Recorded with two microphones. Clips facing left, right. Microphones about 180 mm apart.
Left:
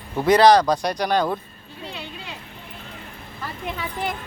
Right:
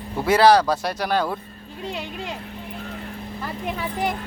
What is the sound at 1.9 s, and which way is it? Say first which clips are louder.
Speech: right 6 dB; 45° right (ahead or behind).